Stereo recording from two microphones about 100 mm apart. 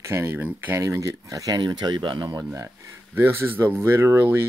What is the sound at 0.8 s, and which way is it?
Speech, 30° right (ahead or behind).